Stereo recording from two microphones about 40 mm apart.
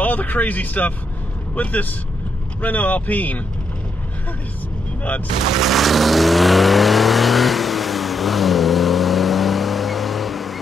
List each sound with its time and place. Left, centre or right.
0.0 s speech: left
5.5 s vehicle: centre